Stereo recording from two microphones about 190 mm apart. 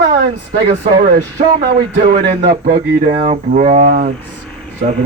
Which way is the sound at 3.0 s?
40° right (ahead or behind).